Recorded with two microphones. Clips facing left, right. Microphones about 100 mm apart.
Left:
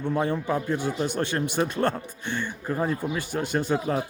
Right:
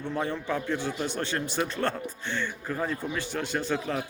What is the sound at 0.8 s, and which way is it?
Speech, 45° left (ahead or behind).